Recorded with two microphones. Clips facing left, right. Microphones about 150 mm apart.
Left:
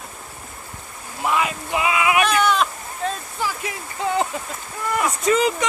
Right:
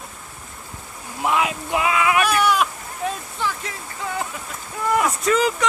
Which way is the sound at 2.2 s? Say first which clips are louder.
Even; 10° right (ahead or behind).